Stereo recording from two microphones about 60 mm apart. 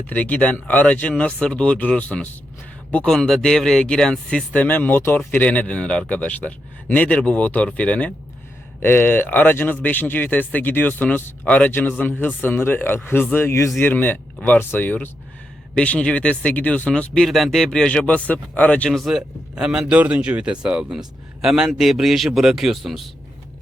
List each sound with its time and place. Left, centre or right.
0.1 s speech: left
1.1 s speech: centre
3.1 s speech: centre
4.5 s speech: left
8.8 s speech: left
11.4 s speech: left
11.7 s speech: left
13.7 s speech: left; by 17.2 s centre
17.2 s speech: centre
17.7 s speech: centre
18.0 s speech: left
18.9 s speech: centre
20.0 s speech: right; by 23.0 s centre